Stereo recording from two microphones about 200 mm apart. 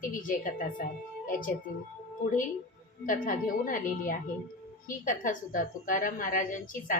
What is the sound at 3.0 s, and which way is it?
A woman's voice, 40° left (ahead or behind).